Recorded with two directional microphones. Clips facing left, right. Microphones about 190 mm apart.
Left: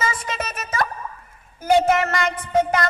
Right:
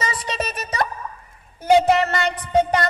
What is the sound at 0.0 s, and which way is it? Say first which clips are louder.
Music: even; 30° right (ahead or behind).